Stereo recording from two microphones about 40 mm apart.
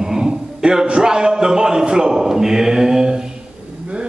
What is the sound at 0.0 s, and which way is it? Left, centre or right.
A man's voice, centre.